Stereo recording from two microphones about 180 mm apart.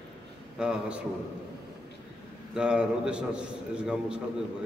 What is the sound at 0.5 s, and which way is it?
Speech, 5° right (ahead or behind).